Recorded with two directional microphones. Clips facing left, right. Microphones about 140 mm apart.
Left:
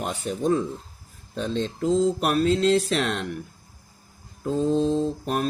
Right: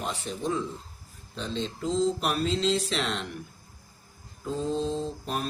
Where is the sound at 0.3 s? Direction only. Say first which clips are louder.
Left 8 dB; 50° left (ahead or behind).